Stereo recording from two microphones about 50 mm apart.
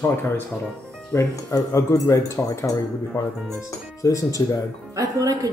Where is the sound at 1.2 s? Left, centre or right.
Left.